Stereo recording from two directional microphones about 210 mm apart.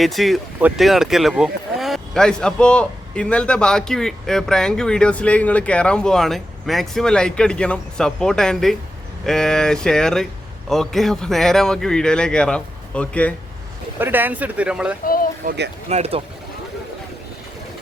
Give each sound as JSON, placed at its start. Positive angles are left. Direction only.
{"t": 0.0, "sound": "speech", "side_deg": 0}
{"t": 14.0, "sound": "speech", "side_deg": -10}
{"t": 15.0, "sound": "speech", "side_deg": 45}
{"t": 15.4, "sound": "speech", "side_deg": -55}
{"t": 15.9, "sound": "speech", "side_deg": -30}